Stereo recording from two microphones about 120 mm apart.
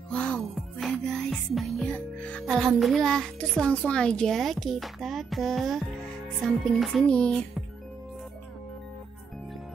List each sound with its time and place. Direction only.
0.1 s music: 5° left (ahead or behind)
1.9 s music: 10° left (ahead or behind)
6.4 s speech: centre (ahead or behind)